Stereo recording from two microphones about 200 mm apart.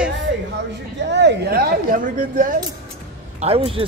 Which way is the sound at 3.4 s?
30° right (ahead or behind).